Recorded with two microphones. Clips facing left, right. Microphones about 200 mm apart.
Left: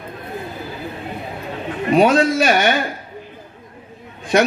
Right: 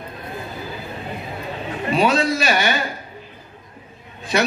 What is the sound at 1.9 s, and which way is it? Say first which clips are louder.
Speech: left 5 dB; 55° left (ahead or behind).